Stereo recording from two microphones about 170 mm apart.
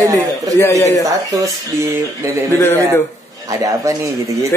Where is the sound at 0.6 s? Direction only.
20° left (ahead or behind).